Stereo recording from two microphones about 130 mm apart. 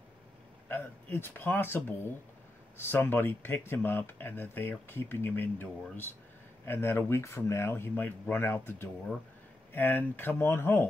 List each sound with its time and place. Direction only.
0.7 s speech: 15° left (ahead or behind)
2.8 s speech: 15° left (ahead or behind)